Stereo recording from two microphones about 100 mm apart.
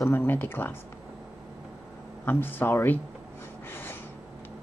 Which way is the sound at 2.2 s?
20° left (ahead or behind).